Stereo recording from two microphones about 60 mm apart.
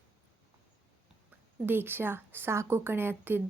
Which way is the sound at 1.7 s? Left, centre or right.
Right.